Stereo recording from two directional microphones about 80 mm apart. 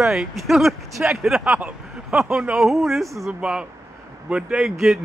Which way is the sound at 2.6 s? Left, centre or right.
Centre.